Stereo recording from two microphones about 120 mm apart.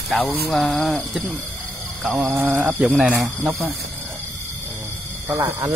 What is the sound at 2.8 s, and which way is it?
Speech, 5° right (ahead or behind).